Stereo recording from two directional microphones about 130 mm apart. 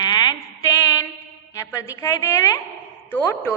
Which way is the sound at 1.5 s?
25° left (ahead or behind).